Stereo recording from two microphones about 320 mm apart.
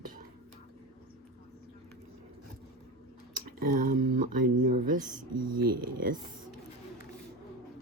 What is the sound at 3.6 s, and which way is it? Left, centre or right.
Speech, right.